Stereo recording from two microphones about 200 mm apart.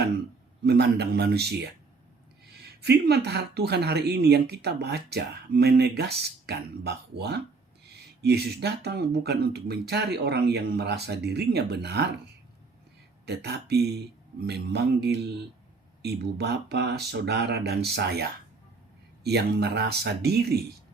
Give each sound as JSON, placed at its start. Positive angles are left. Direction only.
{"t": 0.6, "sound": "speech", "side_deg": -55}
{"t": 13.2, "sound": "speech", "side_deg": -55}